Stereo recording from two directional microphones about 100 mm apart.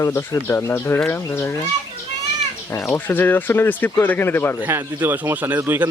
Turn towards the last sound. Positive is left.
turn(degrees=-20)  # may be behind; listen again after turning